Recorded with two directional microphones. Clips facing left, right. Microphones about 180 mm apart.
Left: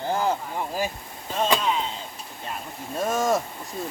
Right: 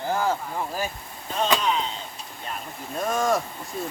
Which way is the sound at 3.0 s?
5° left (ahead or behind).